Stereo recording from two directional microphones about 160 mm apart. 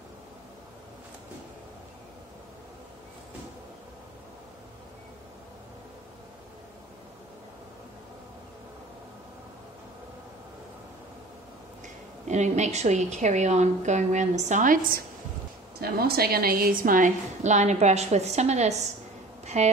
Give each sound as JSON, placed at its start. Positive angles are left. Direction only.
{"t": 12.3, "sound": "a woman's voice", "side_deg": -45}
{"t": 15.8, "sound": "a woman's voice", "side_deg": -75}
{"t": 19.4, "sound": "a sound", "side_deg": -45}